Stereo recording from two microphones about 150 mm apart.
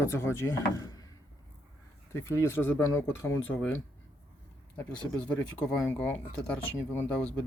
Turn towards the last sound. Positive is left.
turn(degrees=10)  # may be behind; listen again after turning